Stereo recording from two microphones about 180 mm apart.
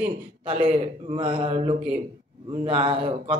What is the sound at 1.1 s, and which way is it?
Mantra, 30° right (ahead or behind).